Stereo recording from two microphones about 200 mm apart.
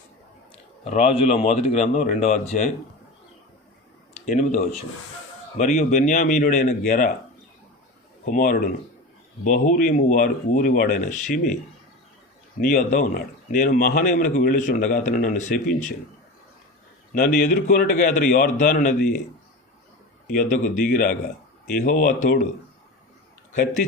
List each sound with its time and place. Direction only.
0.5 s speech: 35° left (ahead or behind)
4.3 s speech: 35° left (ahead or behind)
8.2 s a man's voice: 45° left (ahead or behind)
12.7 s speech: 45° left (ahead or behind)
17.2 s a man's voice: 45° left (ahead or behind)
20.2 s a man's voice: 45° left (ahead or behind)
23.5 s speech: 40° left (ahead or behind)